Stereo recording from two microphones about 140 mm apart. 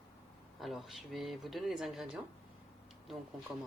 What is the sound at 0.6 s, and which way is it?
Speech, centre (ahead or behind).